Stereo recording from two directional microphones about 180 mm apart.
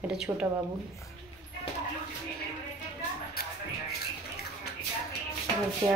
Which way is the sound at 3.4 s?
55° left (ahead or behind).